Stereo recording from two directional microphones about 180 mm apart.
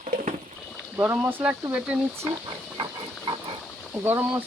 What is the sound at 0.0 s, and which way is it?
Rowboat, 45° right (ahead or behind).